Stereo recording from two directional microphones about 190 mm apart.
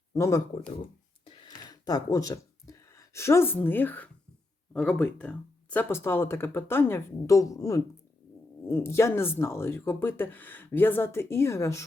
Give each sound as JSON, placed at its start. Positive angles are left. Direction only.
{"t": 0.1, "sound": "speech", "side_deg": 15}
{"t": 1.2, "sound": "a sound", "side_deg": 25}
{"t": 4.7, "sound": "speech", "side_deg": 5}